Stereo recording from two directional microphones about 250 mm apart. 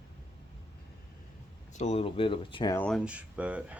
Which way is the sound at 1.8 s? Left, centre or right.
Left.